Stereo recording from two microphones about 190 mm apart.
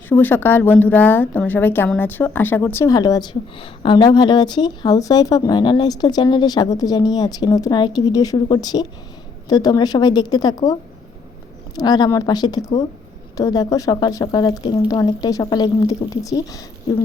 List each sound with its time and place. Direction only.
0.1 s a woman's voice: 10° left (ahead or behind)